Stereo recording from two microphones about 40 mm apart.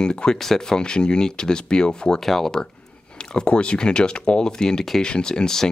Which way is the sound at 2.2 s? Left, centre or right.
Centre.